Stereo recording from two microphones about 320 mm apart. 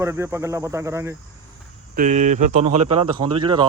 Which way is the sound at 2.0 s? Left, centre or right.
Right.